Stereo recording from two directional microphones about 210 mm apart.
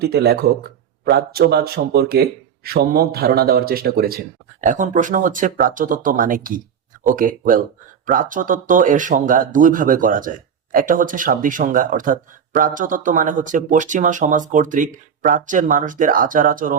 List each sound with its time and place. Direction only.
0.0 s speech: 50° right (ahead or behind)